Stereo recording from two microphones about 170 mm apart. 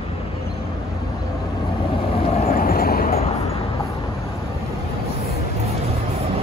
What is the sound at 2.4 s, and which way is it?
Boat, 55° left (ahead or behind).